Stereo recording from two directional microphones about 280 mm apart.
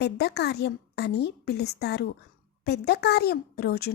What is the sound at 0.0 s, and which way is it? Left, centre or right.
Speech, left.